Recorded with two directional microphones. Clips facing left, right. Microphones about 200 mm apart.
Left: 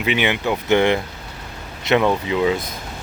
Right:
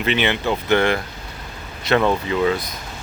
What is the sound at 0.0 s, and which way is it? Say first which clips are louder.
Speech: even; 10° left (ahead or behind).